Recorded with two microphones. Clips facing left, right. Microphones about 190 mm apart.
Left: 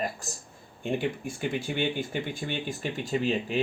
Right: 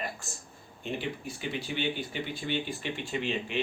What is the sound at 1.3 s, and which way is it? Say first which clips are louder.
Speech: left 4 dB; 50° left (ahead or behind).